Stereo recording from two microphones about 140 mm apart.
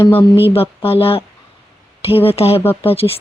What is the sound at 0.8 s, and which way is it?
Speech, 45° left (ahead or behind).